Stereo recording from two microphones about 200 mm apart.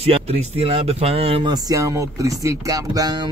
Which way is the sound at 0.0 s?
30° right (ahead or behind).